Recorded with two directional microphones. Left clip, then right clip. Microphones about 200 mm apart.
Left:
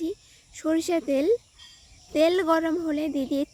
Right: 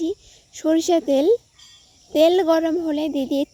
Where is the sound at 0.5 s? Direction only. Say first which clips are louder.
Right 7 dB; 20° right (ahead or behind).